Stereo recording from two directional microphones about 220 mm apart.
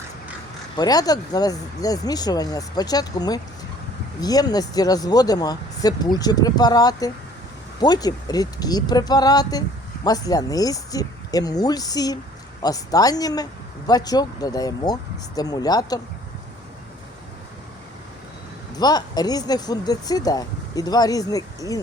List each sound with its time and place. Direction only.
0.8 s speech: 15° left (ahead or behind)
18.8 s speech: 20° left (ahead or behind)